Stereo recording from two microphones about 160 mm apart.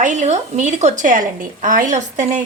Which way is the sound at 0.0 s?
50° right (ahead or behind).